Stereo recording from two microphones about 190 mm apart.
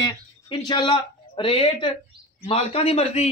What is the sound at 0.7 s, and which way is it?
A man's voice, 25° left (ahead or behind).